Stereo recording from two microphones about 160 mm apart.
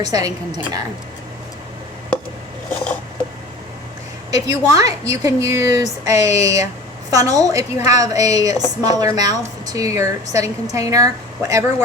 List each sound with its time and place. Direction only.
0.0 s a woman's voice: 20° right (ahead or behind)
4.3 s a woman's voice: 20° right (ahead or behind)